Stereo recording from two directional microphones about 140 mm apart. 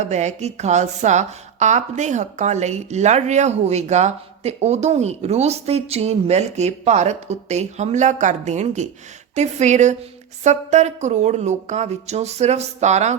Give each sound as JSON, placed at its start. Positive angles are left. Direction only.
{"t": 0.0, "sound": "a woman's voice", "side_deg": -55}